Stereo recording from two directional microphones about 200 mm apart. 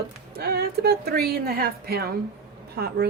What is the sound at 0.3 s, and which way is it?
Speech, 50° right (ahead or behind).